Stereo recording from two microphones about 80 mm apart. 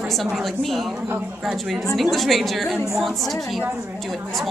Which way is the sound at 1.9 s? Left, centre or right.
Centre.